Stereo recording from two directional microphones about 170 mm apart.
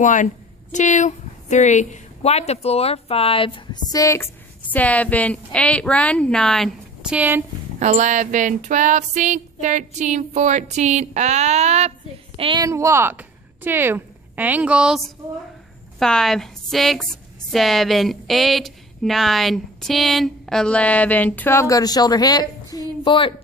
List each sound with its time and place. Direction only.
0.0 s a woman's voice: 45° left (ahead or behind); by 7.4 s 10° right (ahead or behind)
7.8 s female singing: 45° right (ahead or behind)
12.4 s a woman's voice: 30° right (ahead or behind)
12.6 s a woman's voice: 15° right (ahead or behind); by 23.3 s 30° left (ahead or behind)